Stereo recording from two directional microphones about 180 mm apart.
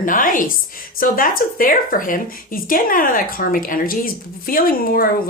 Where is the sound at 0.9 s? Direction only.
50° left (ahead or behind).